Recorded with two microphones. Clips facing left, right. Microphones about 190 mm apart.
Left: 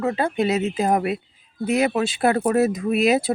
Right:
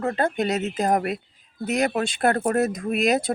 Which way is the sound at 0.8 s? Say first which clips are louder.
Even; 45° right (ahead or behind).